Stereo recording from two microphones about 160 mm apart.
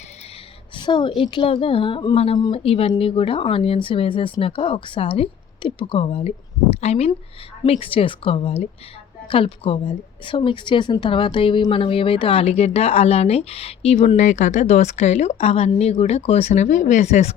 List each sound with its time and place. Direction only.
0.8 s speech: 30° left (ahead or behind); by 17.3 s 45° left (ahead or behind)